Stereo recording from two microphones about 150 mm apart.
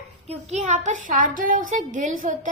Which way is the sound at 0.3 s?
50° right (ahead or behind).